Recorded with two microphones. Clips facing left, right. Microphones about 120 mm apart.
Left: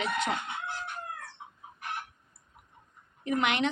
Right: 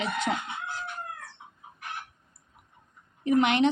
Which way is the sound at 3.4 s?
25° right (ahead or behind).